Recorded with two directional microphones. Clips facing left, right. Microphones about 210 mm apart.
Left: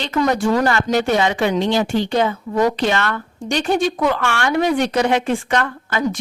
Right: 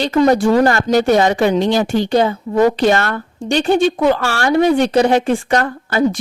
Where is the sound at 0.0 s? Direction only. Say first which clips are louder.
Right 6 dB; 35° right (ahead or behind).